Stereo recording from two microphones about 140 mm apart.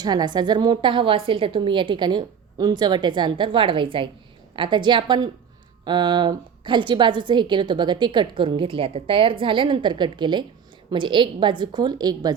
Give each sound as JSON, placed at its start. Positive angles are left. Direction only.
{"t": 0.0, "sound": "a woman's voice", "side_deg": -30}